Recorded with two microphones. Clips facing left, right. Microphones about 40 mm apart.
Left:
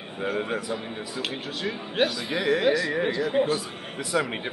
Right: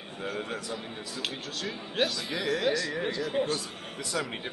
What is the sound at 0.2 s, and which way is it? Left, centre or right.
A man's voice, centre.